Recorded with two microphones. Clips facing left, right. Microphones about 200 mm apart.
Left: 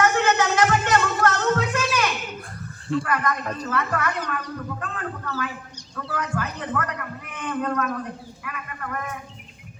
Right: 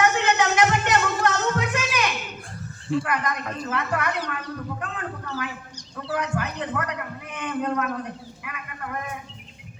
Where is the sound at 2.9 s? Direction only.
5° right (ahead or behind).